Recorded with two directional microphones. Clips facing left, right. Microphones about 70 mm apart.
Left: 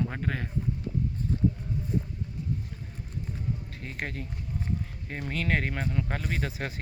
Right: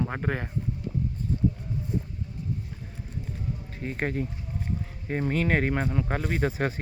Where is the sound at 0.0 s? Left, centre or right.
Right.